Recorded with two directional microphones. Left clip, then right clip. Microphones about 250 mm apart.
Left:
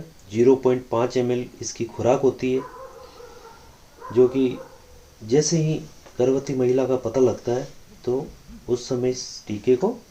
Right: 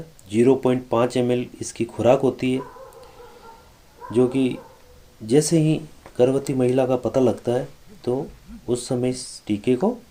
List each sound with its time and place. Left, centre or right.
0.3 s speech: right
4.1 s speech: right
8.7 s speech: right